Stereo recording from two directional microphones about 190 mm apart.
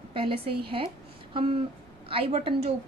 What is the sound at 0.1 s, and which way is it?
A woman's voice, 30° right (ahead or behind).